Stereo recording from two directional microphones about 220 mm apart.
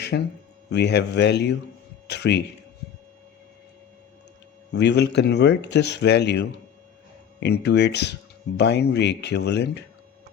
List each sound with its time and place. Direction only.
0.1 s speech: 55° left (ahead or behind)
4.7 s speech: 50° left (ahead or behind)